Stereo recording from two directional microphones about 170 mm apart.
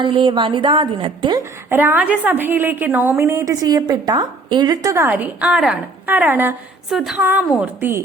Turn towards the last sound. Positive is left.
turn(degrees=-10)  # may be behind; listen again after turning